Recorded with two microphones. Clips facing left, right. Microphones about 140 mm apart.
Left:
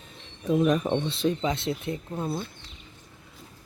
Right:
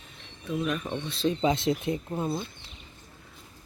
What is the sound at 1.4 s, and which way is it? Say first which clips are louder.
Speech: right 3 dB; 15° right (ahead or behind).